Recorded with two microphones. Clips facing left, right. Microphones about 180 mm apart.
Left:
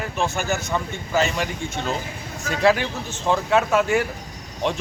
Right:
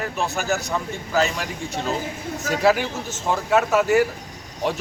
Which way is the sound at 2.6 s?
5° right (ahead or behind).